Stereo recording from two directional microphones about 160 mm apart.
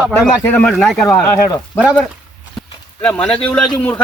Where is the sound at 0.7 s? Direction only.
Centre (ahead or behind).